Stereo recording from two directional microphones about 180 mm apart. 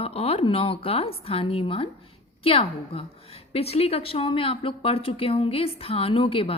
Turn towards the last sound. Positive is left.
turn(degrees=30)  # may be behind; listen again after turning